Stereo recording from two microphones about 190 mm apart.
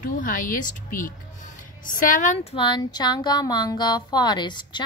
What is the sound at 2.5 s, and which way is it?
Speech, 25° left (ahead or behind).